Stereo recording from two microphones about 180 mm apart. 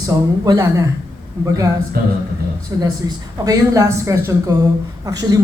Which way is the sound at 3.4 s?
20° right (ahead or behind).